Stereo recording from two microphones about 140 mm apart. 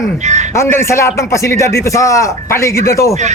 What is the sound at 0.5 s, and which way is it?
A man's voice, 20° left (ahead or behind).